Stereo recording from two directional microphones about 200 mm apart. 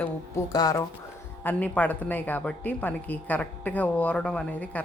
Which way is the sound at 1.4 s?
10° left (ahead or behind).